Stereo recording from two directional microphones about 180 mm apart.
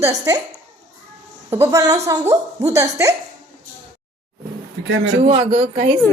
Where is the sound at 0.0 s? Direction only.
20° right (ahead or behind).